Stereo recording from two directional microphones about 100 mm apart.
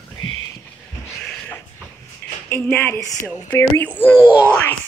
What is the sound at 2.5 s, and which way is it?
Speech, 20° left (ahead or behind).